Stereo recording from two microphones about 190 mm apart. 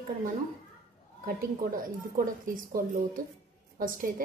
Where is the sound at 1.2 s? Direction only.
50° right (ahead or behind).